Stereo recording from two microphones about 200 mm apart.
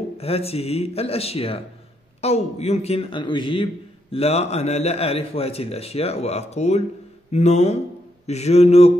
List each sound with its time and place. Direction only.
0.2 s a man's voice: 30° left (ahead or behind)